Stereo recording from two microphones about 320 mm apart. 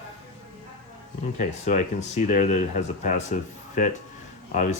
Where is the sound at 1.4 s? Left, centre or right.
Left.